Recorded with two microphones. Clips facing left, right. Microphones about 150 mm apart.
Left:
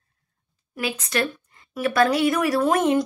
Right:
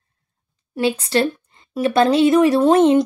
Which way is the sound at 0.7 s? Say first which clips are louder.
Right 7 dB; 30° right (ahead or behind).